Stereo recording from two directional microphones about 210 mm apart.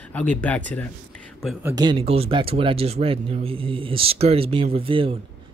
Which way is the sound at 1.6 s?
15° right (ahead or behind).